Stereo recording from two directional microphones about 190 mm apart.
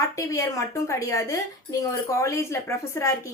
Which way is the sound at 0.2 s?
15° left (ahead or behind).